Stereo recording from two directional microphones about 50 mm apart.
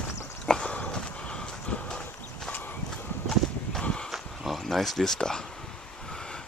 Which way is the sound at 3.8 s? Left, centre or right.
Centre.